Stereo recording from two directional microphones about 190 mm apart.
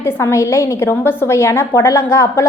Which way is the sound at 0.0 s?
15° left (ahead or behind).